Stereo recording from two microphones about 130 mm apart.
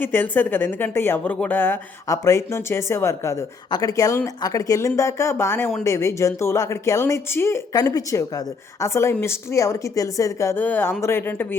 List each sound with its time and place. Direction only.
0.0 s a woman's voice: 15° left (ahead or behind)